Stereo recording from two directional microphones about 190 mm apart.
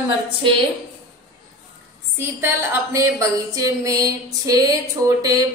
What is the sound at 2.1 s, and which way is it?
A woman's voice, 15° right (ahead or behind).